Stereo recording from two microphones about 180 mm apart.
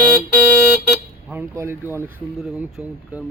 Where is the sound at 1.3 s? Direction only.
15° right (ahead or behind).